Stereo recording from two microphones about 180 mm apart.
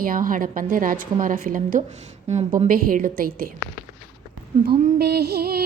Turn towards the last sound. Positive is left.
turn(degrees=-60)  # may be behind; listen again after turning